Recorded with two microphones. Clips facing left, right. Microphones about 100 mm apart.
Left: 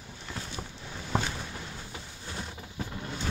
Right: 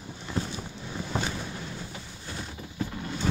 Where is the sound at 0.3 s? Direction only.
15° right (ahead or behind).